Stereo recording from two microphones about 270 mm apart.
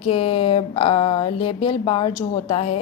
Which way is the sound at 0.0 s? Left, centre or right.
Left.